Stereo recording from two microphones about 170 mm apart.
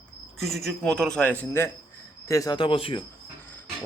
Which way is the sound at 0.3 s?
Centre (ahead or behind).